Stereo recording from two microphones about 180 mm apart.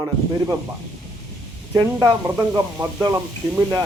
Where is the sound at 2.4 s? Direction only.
10° right (ahead or behind).